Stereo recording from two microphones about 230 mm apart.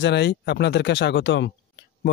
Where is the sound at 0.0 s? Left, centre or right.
Left.